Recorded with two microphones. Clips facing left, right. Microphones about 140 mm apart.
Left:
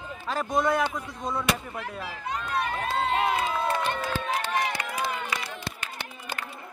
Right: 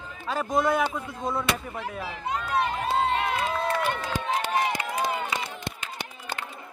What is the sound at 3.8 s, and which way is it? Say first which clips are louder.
Run: right 1 dB; 15° right (ahead or behind).